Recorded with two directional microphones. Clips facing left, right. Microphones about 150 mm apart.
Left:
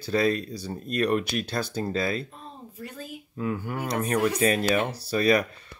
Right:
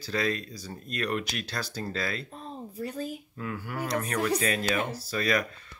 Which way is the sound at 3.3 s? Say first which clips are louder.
Left 9 dB; 20° left (ahead or behind).